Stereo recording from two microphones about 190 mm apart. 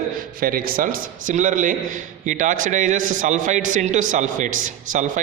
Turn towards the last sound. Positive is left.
turn(degrees=-45)  # may be behind; listen again after turning